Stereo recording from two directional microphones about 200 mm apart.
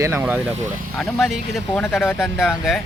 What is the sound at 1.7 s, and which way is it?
Speech, 5° left (ahead or behind).